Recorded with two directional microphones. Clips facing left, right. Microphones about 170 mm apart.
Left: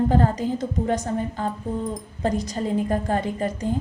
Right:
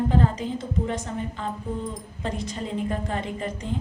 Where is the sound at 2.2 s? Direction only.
40° left (ahead or behind).